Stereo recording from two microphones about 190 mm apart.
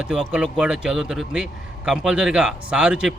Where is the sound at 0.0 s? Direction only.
5° right (ahead or behind).